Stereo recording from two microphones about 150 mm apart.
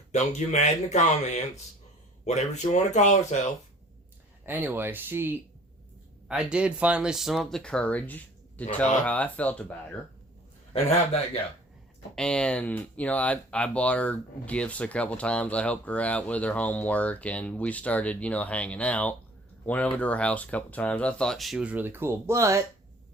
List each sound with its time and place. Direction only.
0.1 s speech: 50° left (ahead or behind)
2.2 s speech: 50° left (ahead or behind)
4.4 s speech: 10° right (ahead or behind); by 9.7 s 10° left (ahead or behind)
12.1 s speech: 5° left (ahead or behind); by 22.6 s 20° right (ahead or behind)